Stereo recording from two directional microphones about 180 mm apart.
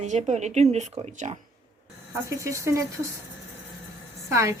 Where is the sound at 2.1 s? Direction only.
15° right (ahead or behind).